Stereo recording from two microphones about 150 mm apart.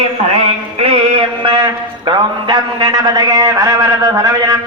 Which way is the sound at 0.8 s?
35° right (ahead or behind).